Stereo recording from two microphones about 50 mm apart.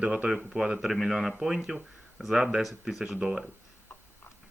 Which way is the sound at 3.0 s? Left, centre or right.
Centre.